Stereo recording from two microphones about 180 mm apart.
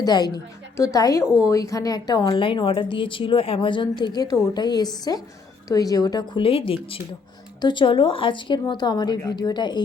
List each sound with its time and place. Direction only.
0.0 s a woman's voice: 20° left (ahead or behind)